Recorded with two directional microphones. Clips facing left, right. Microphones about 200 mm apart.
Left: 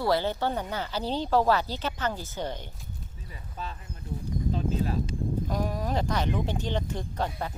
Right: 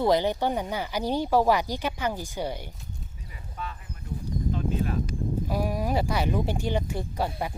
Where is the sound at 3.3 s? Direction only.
30° left (ahead or behind).